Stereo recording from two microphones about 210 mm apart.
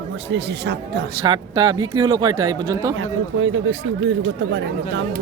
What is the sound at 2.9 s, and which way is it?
Speech, 75° right (ahead or behind).